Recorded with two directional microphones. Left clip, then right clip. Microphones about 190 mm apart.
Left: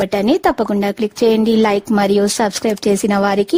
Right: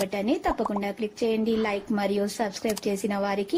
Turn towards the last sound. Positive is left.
turn(degrees=60)  # may be behind; listen again after turning